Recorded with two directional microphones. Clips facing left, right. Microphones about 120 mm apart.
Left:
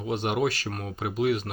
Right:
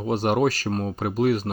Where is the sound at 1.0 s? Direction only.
40° right (ahead or behind).